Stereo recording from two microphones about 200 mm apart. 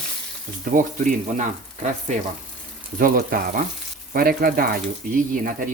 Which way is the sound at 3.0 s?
45° right (ahead or behind).